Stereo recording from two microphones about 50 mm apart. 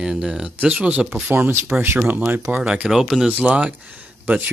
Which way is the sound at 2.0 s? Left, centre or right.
Right.